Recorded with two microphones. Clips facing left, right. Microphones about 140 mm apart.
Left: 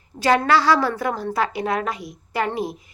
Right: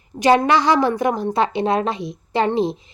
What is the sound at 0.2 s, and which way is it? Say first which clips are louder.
A woman's voice: right 3 dB; 20° right (ahead or behind).